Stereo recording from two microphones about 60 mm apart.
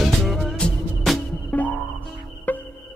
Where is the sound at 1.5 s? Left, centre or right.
Left.